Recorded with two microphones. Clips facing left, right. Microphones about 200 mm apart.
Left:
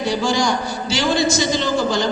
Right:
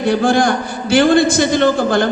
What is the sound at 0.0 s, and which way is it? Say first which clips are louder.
A man's voice: right 6 dB; 55° right (ahead or behind).